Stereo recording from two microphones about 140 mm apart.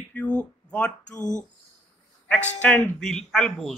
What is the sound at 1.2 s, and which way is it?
Speech, 60° left (ahead or behind).